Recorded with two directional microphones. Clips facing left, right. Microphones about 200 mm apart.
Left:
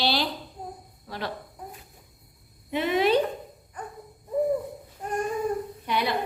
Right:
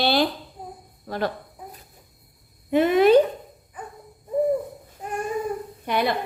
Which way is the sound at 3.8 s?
5° right (ahead or behind).